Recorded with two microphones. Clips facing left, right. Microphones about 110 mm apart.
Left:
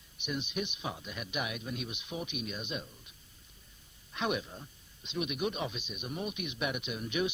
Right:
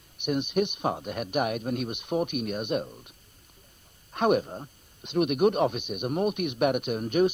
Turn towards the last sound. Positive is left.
turn(degrees=-50)  # may be behind; listen again after turning